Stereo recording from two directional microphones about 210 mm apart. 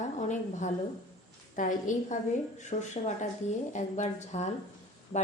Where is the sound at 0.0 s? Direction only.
35° left (ahead or behind).